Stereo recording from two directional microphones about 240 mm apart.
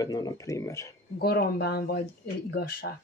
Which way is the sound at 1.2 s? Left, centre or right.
Left.